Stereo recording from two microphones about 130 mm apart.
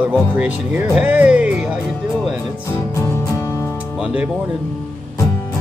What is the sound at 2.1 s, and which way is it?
Music, centre (ahead or behind).